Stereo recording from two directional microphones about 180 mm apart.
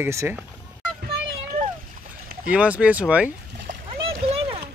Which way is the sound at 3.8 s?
30° right (ahead or behind).